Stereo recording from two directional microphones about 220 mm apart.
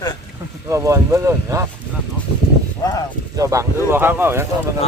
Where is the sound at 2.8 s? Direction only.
15° left (ahead or behind).